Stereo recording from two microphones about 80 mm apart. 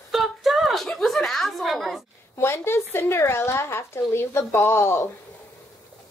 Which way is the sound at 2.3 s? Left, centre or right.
Left.